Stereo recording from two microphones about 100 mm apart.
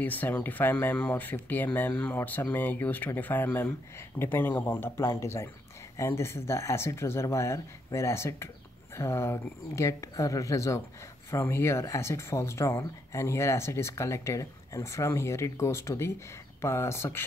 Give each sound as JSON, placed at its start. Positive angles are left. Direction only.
{"t": 0.0, "sound": "speech", "side_deg": 20}